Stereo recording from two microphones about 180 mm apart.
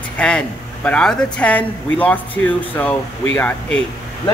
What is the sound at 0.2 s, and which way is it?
Speech, 5° left (ahead or behind).